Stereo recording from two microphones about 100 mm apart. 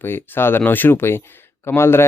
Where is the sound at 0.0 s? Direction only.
20° left (ahead or behind).